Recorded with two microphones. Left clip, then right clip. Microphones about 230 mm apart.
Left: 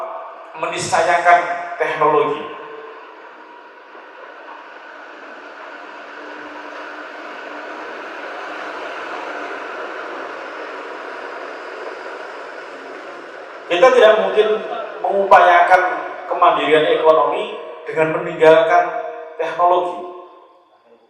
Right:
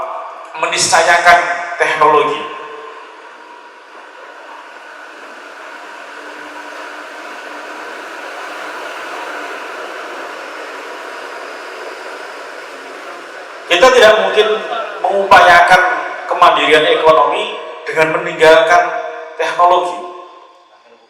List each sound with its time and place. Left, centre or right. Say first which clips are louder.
0.5 s a man's voice: right 7 dB; centre
1.1 s speech: right 4 dB; centre
1.4 s a man's voice: right 5 dB; centre
6.6 s a sound: right 3 dB; centre
19.7 s a man's voice: right 4 dB; centre